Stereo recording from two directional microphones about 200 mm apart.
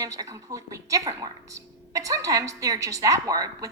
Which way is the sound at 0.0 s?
15° right (ahead or behind).